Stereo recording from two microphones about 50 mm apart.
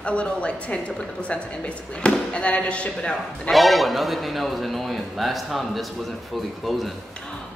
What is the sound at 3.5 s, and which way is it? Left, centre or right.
A man's voice, centre.